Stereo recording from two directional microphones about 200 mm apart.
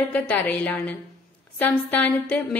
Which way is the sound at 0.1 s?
10° left (ahead or behind).